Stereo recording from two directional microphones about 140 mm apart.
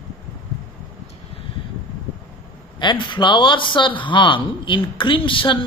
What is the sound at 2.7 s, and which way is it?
Speech, 35° left (ahead or behind).